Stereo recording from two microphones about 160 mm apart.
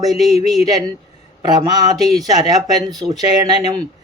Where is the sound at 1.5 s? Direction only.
25° right (ahead or behind).